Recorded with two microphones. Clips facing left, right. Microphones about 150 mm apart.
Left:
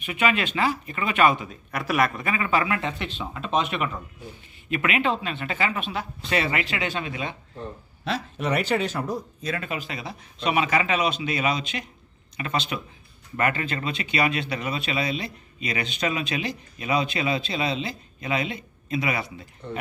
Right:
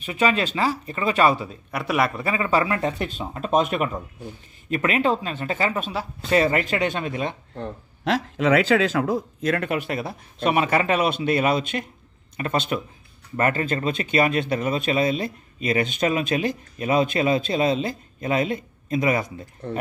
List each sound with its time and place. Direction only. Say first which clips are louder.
0.0 s speech: right 3 dB; 35° right (ahead or behind)
7.5 s speech: right 4 dB; 90° right; by 19.3 s 45° right (ahead or behind)